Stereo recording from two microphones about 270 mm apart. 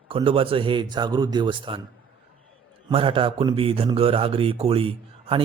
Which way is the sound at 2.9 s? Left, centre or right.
Centre.